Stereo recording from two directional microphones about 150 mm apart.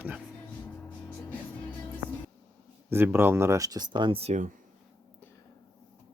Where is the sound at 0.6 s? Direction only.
10° left (ahead or behind).